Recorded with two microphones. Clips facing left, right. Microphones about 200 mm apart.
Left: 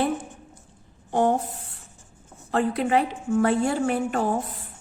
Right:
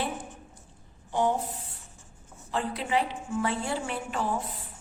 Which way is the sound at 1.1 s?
50° left (ahead or behind).